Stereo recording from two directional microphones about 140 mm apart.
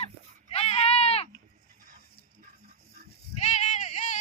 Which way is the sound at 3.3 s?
60° left (ahead or behind).